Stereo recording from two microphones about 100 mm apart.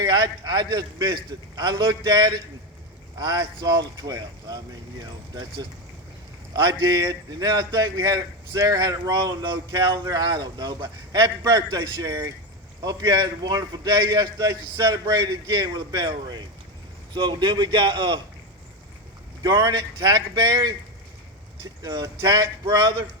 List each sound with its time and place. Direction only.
0.0 s a man's voice: 40° right (ahead or behind)
19.4 s a man's voice: 40° right (ahead or behind)